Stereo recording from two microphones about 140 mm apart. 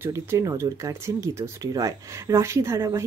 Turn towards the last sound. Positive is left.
turn(degrees=-20)  # may be behind; listen again after turning